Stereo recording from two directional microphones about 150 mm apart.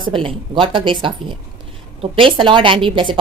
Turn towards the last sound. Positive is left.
turn(degrees=-35)  # may be behind; listen again after turning